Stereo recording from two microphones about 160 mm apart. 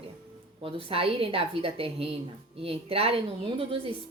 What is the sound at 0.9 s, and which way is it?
A woman's voice, 35° right (ahead or behind).